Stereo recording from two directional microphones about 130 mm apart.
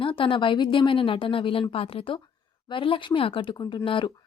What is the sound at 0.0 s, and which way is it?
Speech, 40° left (ahead or behind).